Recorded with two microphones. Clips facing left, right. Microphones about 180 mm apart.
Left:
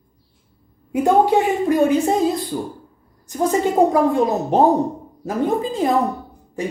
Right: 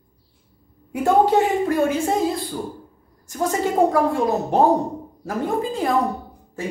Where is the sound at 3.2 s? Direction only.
20° left (ahead or behind).